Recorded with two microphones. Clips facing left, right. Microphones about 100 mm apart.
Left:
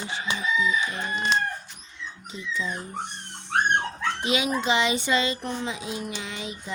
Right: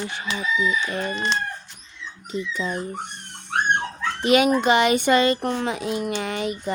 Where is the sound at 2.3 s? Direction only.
55° right (ahead or behind).